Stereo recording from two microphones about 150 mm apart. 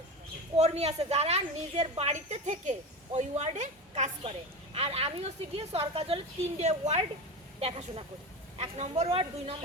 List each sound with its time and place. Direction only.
0.5 s a woman's voice: 45° right (ahead or behind)
4.2 s a woman's voice: 40° right (ahead or behind)